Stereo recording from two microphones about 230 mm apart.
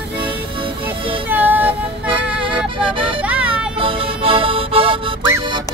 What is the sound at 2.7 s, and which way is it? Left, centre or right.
Music, right.